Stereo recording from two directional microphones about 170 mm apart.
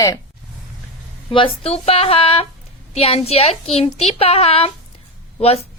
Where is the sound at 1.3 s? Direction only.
35° left (ahead or behind).